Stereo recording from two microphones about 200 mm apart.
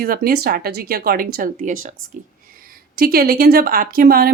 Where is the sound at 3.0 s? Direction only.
50° right (ahead or behind).